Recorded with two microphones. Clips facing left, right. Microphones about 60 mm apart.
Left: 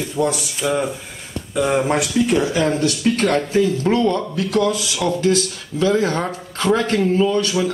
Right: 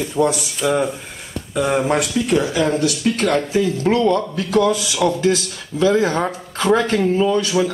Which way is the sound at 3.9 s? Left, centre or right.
Centre.